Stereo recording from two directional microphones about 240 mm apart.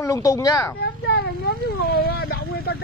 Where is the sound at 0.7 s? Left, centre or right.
Left.